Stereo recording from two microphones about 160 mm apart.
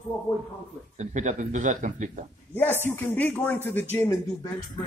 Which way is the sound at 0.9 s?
50° right (ahead or behind).